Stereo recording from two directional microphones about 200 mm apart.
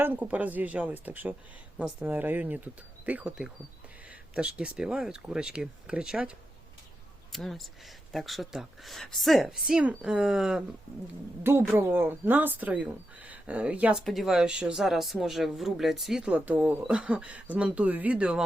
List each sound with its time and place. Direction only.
0.0 s speech: 10° right (ahead or behind)
7.3 s speech: centre (ahead or behind)
11.8 s speech: 10° right (ahead or behind)